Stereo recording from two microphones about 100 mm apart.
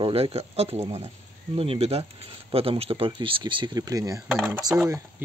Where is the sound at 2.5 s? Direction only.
70° right (ahead or behind); by 3.8 s 50° right (ahead or behind).